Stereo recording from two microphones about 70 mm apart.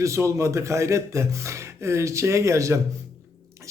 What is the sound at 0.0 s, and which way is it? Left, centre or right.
Speech, right.